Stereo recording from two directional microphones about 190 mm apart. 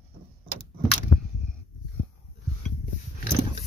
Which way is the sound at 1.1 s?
35° left (ahead or behind).